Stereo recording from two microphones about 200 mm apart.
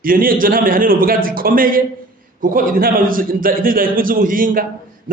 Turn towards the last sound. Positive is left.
turn(degrees=-45)  # may be behind; listen again after turning